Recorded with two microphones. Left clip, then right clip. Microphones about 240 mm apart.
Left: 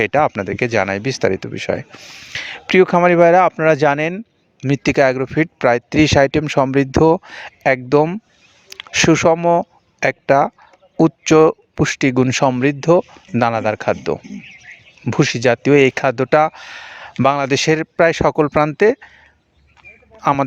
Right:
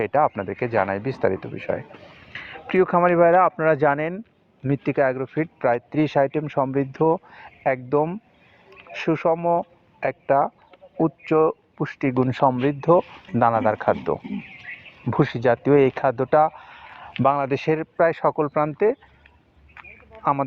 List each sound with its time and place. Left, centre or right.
0.0 s speech: left